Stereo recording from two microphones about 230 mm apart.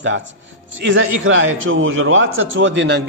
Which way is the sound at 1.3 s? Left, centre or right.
Right.